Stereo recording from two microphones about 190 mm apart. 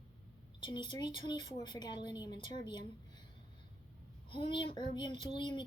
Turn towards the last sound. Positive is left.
turn(degrees=25)  # may be behind; listen again after turning